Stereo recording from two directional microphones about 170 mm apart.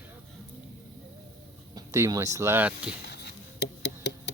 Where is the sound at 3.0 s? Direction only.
75° left (ahead or behind).